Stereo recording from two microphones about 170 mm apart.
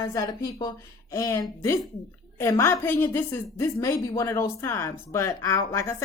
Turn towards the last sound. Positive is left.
turn(degrees=15)  # may be behind; listen again after turning